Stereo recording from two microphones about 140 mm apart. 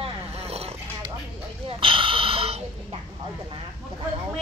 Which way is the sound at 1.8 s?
40° right (ahead or behind).